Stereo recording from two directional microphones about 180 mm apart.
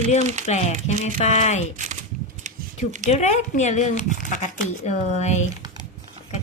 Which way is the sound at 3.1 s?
40° left (ahead or behind).